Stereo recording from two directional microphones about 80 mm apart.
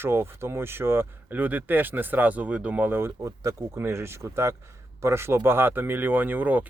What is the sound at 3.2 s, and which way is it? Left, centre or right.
Speech, right.